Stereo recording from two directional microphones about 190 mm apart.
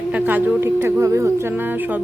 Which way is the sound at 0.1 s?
10° right (ahead or behind).